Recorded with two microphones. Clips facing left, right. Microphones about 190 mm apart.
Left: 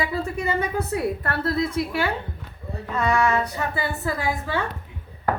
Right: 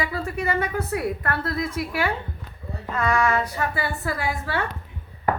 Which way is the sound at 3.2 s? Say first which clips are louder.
Even; 20° left (ahead or behind).